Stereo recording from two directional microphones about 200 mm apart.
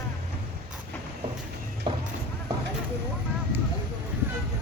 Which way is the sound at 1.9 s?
25° right (ahead or behind).